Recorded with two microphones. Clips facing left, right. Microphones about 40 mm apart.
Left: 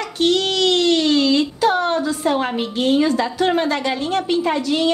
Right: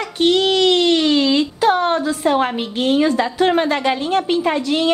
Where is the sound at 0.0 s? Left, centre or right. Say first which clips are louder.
Right 2 dB; right.